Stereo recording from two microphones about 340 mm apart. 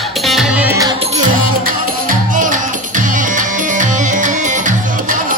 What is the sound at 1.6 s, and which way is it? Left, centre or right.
Music, right.